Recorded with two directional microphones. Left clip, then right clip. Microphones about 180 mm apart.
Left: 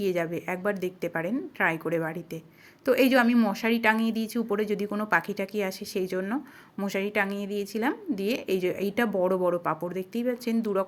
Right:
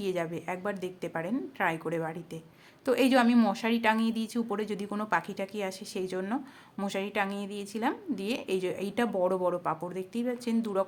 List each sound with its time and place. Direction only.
0.0 s speech: 15° left (ahead or behind)